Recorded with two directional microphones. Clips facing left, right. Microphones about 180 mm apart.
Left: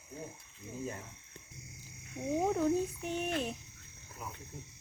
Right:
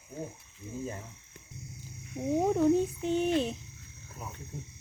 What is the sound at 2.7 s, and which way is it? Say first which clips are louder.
Speech: right 6 dB; 25° right (ahead or behind).